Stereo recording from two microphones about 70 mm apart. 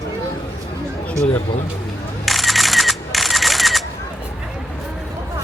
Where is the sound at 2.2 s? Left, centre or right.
Centre.